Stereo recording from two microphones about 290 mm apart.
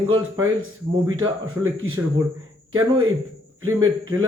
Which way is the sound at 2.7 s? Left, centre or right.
Right.